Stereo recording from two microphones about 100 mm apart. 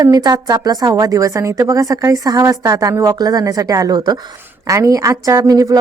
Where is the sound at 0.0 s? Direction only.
40° right (ahead or behind).